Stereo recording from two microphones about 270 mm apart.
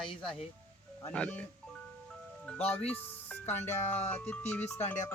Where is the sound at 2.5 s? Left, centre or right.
Centre.